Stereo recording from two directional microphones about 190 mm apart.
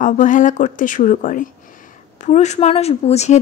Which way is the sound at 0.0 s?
40° left (ahead or behind).